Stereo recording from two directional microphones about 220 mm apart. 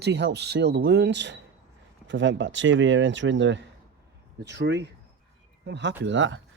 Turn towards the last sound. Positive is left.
turn(degrees=-55)  # may be behind; listen again after turning